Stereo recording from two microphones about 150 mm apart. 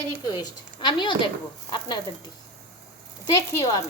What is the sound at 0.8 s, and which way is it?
Speech, 30° left (ahead or behind).